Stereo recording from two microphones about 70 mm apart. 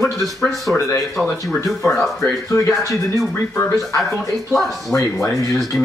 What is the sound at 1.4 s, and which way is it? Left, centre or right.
Speech, centre.